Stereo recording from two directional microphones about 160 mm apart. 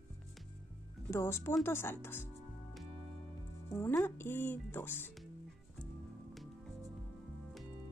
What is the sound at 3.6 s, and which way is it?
Speech, 15° left (ahead or behind).